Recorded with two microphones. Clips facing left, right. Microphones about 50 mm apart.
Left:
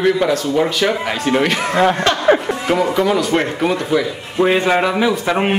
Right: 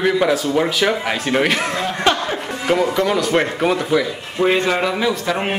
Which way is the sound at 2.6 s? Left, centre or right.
Centre.